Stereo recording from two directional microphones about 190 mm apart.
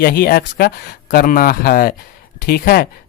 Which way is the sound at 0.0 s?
50° left (ahead or behind).